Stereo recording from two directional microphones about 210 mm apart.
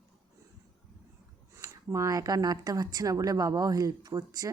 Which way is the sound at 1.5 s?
15° right (ahead or behind).